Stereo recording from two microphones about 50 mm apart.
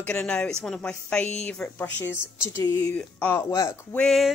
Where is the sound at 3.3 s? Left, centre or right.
Left.